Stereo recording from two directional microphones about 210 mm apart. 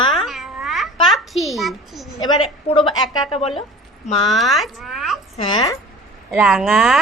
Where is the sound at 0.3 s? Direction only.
Centre (ahead or behind).